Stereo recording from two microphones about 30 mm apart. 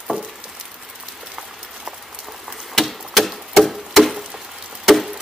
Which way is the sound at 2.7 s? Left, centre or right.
Centre.